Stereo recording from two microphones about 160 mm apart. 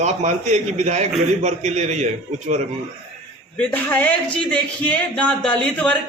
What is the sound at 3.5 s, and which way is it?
A man's voice, 10° left (ahead or behind).